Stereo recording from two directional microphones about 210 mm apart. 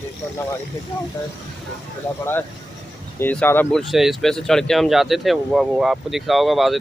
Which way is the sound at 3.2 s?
10° left (ahead or behind).